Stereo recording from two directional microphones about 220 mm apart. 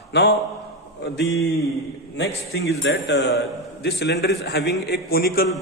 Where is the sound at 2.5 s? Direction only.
45° left (ahead or behind).